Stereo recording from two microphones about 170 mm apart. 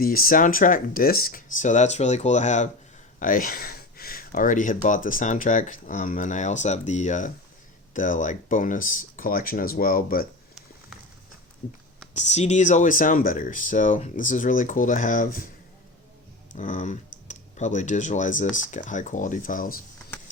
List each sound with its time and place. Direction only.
0.0 s speech: 60° left (ahead or behind)
11.6 s speech: 50° left (ahead or behind)
16.6 s speech: 45° left (ahead or behind)